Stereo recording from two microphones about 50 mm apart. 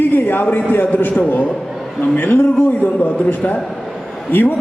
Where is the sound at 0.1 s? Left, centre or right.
Left.